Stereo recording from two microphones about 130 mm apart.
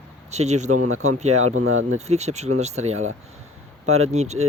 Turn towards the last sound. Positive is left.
turn(degrees=-60)  # may be behind; listen again after turning